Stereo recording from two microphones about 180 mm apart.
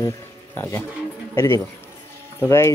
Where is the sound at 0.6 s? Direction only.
15° left (ahead or behind).